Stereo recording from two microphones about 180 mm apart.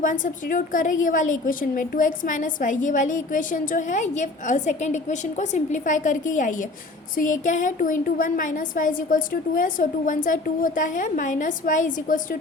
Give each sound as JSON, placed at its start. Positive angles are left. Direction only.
{"t": 0.0, "sound": "a woman's voice", "side_deg": 45}